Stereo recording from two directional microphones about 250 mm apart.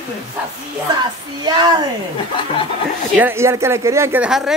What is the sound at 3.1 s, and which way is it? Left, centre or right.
Speech, centre.